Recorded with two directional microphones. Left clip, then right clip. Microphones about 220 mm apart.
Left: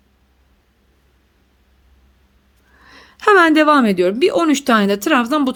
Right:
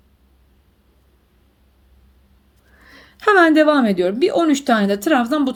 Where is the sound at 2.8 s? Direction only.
15° left (ahead or behind).